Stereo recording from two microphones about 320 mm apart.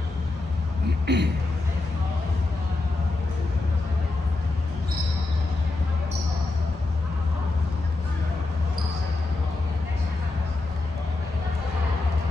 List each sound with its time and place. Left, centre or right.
1.0 s speech: right